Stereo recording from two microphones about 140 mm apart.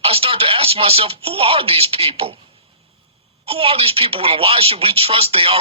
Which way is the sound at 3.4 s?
45° right (ahead or behind).